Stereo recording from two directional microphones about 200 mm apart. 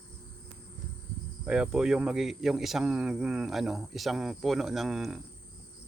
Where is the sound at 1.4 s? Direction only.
5° right (ahead or behind).